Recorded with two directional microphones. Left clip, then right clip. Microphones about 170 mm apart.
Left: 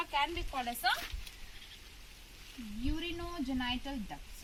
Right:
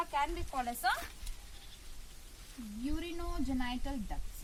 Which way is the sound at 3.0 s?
Centre (ahead or behind).